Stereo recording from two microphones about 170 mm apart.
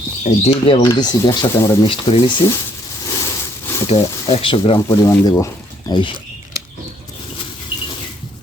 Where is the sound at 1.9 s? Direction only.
30° left (ahead or behind).